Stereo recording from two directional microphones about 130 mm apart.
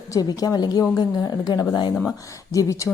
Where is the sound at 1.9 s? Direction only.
10° left (ahead or behind).